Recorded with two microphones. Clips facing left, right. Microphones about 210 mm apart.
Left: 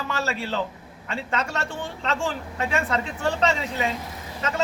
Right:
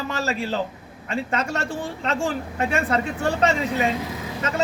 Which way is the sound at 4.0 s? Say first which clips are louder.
Right 7 dB; 90° right.